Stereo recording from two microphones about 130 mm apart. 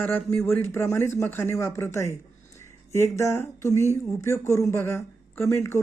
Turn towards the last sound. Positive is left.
turn(degrees=20)  # may be behind; listen again after turning